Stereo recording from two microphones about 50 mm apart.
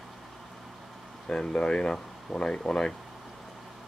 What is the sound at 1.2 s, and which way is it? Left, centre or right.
Speech, centre.